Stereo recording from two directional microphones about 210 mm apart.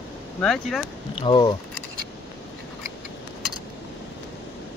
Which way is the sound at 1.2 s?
20° left (ahead or behind).